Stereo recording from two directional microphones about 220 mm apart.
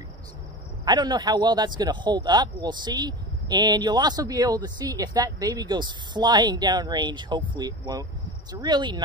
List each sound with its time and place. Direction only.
0.8 s a man's voice: 20° right (ahead or behind)